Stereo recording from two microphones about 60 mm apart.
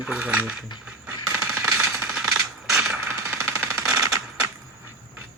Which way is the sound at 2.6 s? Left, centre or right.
Centre.